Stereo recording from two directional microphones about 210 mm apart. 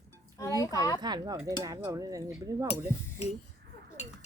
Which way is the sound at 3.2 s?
30° left (ahead or behind).